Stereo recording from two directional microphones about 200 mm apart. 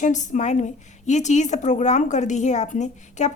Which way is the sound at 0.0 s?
35° left (ahead or behind).